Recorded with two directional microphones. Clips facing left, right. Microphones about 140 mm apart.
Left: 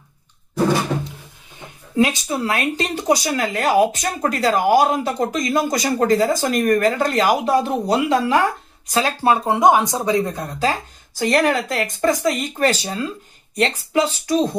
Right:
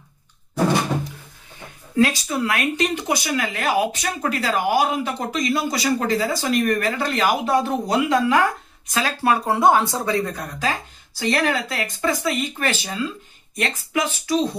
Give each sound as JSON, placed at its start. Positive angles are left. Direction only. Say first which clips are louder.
{"t": 2.0, "sound": "speech", "louder": "left 1 dB", "side_deg": 20}
{"t": 11.1, "sound": "speech", "louder": "left 4 dB", "side_deg": 45}